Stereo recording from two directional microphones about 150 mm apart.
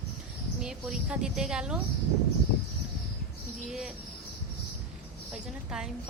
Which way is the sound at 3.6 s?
5° right (ahead or behind).